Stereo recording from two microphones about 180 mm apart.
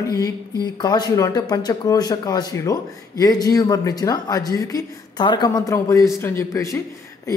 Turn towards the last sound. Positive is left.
turn(degrees=20)  # may be behind; listen again after turning